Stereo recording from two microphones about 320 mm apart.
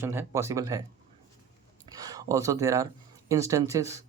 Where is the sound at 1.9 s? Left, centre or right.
Centre.